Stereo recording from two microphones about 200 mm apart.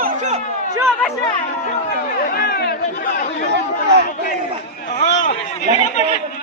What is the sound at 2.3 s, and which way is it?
Chatter, 50° left (ahead or behind).